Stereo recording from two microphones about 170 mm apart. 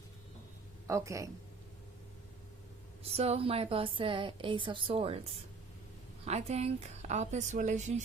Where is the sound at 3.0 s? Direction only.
35° right (ahead or behind).